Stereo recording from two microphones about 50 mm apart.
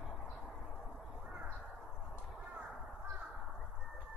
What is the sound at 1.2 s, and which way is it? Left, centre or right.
Crow, centre.